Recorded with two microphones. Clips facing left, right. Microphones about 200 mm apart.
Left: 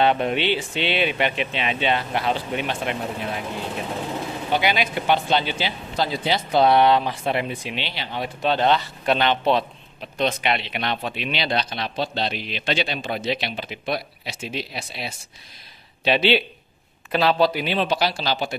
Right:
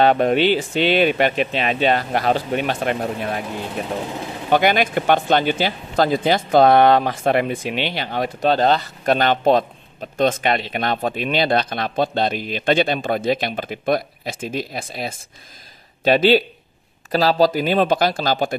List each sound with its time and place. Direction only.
0.0 s speech: 45° right (ahead or behind)
4.5 s speech: 50° right (ahead or behind)